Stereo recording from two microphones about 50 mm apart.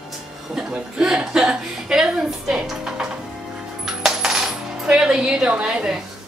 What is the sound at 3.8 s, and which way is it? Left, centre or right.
Coin, centre.